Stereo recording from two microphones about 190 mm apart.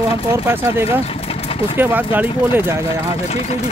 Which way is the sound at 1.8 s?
10° right (ahead or behind).